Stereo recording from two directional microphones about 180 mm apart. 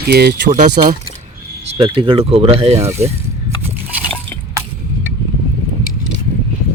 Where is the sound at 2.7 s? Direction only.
15° right (ahead or behind).